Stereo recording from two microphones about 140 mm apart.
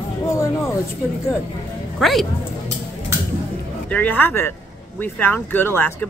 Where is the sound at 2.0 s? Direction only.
Centre (ahead or behind).